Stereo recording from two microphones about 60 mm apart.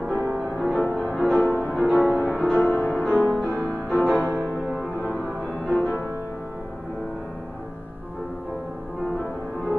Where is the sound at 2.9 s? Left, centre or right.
Centre.